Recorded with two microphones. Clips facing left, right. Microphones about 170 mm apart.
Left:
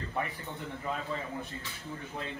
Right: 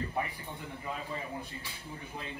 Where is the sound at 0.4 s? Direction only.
15° right (ahead or behind).